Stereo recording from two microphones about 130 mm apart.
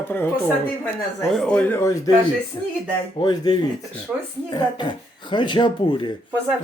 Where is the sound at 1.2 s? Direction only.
5° left (ahead or behind); by 2.0 s 20° left (ahead or behind).